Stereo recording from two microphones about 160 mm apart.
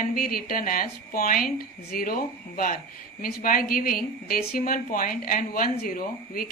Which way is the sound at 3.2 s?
65° left (ahead or behind).